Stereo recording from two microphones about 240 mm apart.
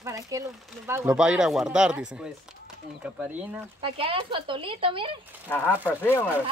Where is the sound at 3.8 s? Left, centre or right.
Right.